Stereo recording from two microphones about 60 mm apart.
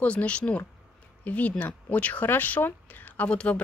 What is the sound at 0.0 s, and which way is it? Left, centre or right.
Speech, left.